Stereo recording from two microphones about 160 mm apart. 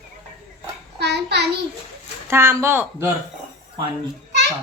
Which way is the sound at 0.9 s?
90° right.